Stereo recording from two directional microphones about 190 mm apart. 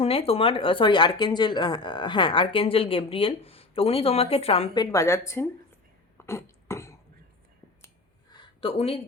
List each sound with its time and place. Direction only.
0.0 s speech: 30° left (ahead or behind); by 5.5 s 15° left (ahead or behind)
6.1 s cough: 15° left (ahead or behind)
8.3 s a sound: 25° left (ahead or behind)